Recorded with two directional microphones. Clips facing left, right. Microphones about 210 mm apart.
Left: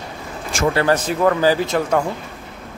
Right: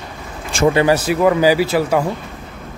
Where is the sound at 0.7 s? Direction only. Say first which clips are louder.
Right 3 dB; 10° right (ahead or behind).